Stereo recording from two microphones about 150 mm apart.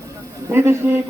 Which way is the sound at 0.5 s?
15° right (ahead or behind).